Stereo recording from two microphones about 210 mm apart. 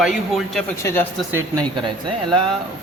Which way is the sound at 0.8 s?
15° left (ahead or behind).